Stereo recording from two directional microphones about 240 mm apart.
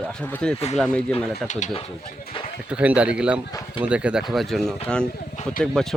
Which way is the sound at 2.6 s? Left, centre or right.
Centre.